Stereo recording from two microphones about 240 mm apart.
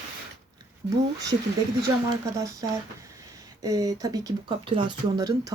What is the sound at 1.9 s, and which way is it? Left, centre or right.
Speech, centre.